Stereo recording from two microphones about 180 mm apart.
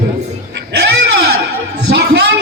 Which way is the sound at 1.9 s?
65° right (ahead or behind).